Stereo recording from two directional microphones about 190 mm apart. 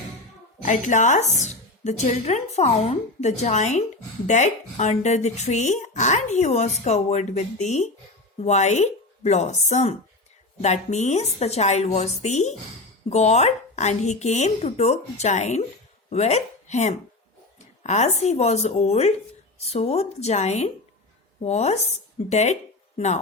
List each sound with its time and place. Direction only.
0.6 s speech: 40° left (ahead or behind)